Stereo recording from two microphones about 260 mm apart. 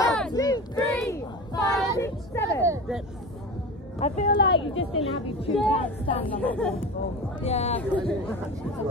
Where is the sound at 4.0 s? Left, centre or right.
Left.